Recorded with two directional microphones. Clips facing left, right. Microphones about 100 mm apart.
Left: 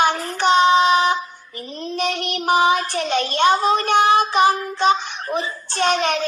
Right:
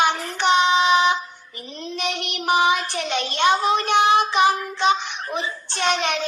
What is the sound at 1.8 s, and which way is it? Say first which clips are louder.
Speech: left 4 dB; 40° left (ahead or behind).